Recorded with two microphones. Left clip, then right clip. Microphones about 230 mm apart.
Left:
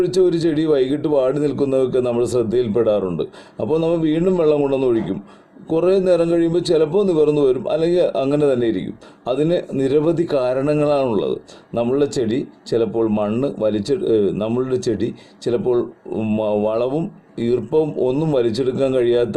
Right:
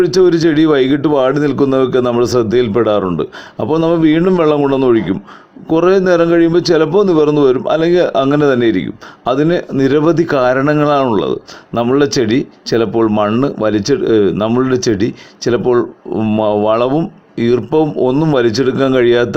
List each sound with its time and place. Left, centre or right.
0.0 s a man's voice: right
16.4 s speech: right
16.6 s a man's voice: right